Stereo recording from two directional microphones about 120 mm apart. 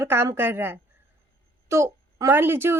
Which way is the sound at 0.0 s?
20° right (ahead or behind).